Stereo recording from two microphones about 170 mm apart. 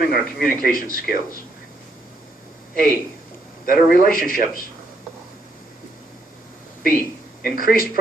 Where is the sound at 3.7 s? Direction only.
55° left (ahead or behind).